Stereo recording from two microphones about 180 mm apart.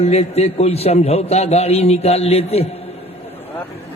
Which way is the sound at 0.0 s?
35° left (ahead or behind).